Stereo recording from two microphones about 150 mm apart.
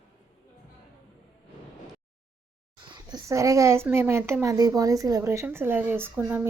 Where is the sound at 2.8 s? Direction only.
30° right (ahead or behind).